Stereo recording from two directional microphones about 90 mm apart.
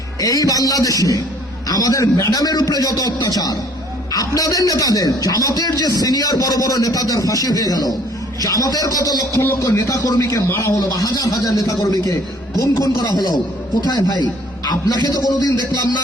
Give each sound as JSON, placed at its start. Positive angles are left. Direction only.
{"t": 0.2, "sound": "a man's voice", "side_deg": 40}